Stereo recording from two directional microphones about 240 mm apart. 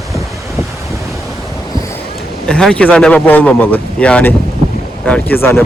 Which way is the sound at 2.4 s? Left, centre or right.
Centre.